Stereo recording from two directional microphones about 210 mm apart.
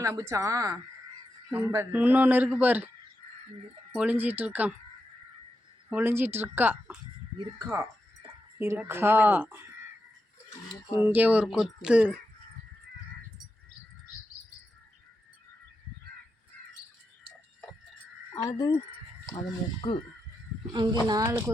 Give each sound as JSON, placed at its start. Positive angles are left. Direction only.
{"t": 0.0, "sound": "speech", "side_deg": -15}
{"t": 3.9, "sound": "speech", "side_deg": -5}
{"t": 5.9, "sound": "speech", "side_deg": -10}
{"t": 11.0, "sound": "speech", "side_deg": -10}
{"t": 18.4, "sound": "speech", "side_deg": 15}
{"t": 20.7, "sound": "speech", "side_deg": -20}